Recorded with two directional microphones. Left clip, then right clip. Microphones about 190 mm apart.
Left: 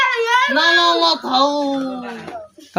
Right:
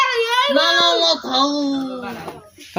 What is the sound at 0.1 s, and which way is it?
Child singing, centre (ahead or behind).